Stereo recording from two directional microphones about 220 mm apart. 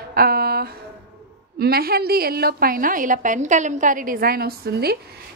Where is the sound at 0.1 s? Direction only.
45° right (ahead or behind).